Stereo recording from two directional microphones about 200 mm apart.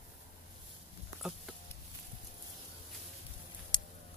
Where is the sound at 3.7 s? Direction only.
20° left (ahead or behind).